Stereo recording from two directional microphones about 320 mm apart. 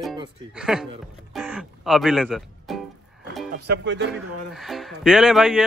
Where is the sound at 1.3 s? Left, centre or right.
Centre.